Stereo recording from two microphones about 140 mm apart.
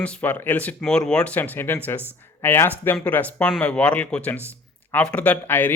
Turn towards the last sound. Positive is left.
turn(degrees=15)  # may be behind; listen again after turning